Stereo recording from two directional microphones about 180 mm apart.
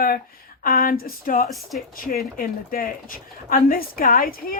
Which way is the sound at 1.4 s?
Centre (ahead or behind).